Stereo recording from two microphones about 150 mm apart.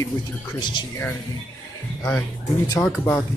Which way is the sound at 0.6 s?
30° left (ahead or behind).